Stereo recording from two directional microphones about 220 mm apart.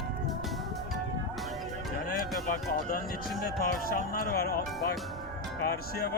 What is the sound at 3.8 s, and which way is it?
Music, 40° left (ahead or behind).